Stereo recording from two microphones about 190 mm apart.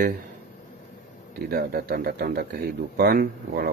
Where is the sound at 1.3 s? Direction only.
55° right (ahead or behind).